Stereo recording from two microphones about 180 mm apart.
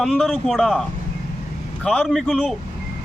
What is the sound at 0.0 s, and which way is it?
A man's voice, 5° left (ahead or behind).